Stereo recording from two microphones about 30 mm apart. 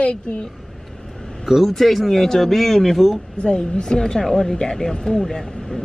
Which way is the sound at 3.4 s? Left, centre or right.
Left.